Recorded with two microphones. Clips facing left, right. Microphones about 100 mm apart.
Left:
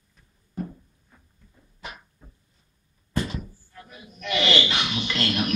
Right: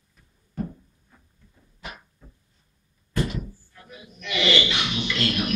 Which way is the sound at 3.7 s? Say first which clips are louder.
Even; 45° left (ahead or behind).